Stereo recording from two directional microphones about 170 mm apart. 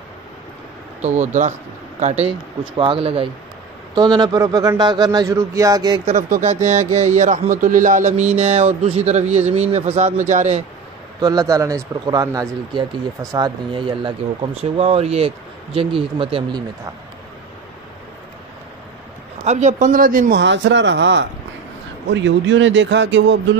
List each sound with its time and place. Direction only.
1.0 s speech: 45° right (ahead or behind); by 5.9 s 20° right (ahead or behind)
6.4 s speech: 45° right (ahead or behind)
11.1 s speech: 20° right (ahead or behind)
19.4 s speech: 45° right (ahead or behind)
20.3 s speech: 90° right